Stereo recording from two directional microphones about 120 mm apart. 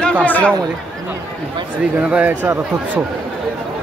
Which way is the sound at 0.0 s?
10° left (ahead or behind).